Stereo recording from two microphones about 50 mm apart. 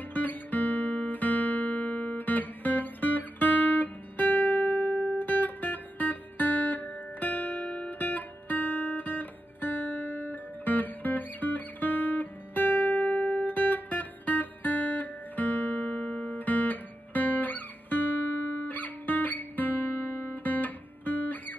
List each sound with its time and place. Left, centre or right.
0.1 s guitar: left
13.5 s music: left